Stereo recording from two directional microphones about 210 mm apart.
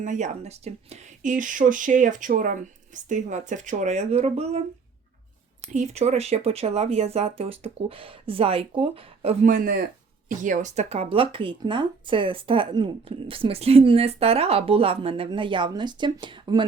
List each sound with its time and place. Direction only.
0.0 s speech: 35° right (ahead or behind)
5.7 s speech: 35° right (ahead or behind)